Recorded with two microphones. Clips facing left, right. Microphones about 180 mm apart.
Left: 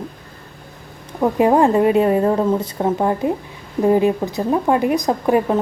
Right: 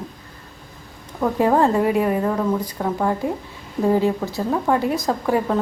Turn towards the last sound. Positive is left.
turn(degrees=20)  # may be behind; listen again after turning